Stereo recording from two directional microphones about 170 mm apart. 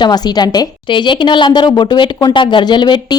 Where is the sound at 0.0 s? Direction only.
25° left (ahead or behind).